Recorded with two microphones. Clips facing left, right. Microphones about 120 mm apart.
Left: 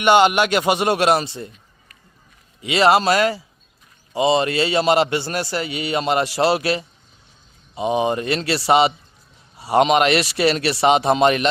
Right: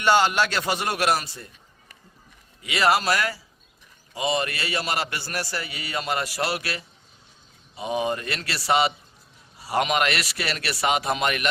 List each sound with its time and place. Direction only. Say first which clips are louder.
0.0 s a man's voice: left 6 dB; 20° left (ahead or behind)
2.6 s a man's voice: left 6 dB; 25° left (ahead or behind)